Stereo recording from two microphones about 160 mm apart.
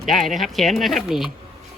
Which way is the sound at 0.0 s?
Centre (ahead or behind).